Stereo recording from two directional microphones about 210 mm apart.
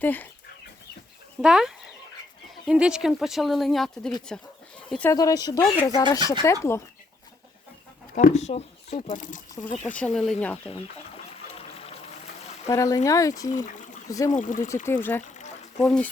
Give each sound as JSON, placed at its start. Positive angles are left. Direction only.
{"t": 0.0, "sound": "speech", "side_deg": 10}
{"t": 1.4, "sound": "speech", "side_deg": -5}
{"t": 5.1, "sound": "speech", "side_deg": 15}
{"t": 8.1, "sound": "speech", "side_deg": 35}
{"t": 9.8, "sound": "speech", "side_deg": 5}
{"t": 11.5, "sound": "music", "side_deg": 25}
{"t": 12.6, "sound": "speech", "side_deg": 15}
{"t": 14.3, "sound": "speech", "side_deg": 35}
{"t": 14.8, "sound": "speech", "side_deg": 10}
{"t": 15.2, "sound": "a sound", "side_deg": 35}